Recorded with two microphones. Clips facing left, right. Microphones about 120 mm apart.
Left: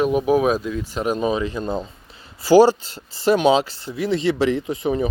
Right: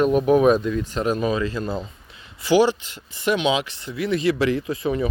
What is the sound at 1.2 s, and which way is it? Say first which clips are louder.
Speech: left 1 dB; 20° left (ahead or behind).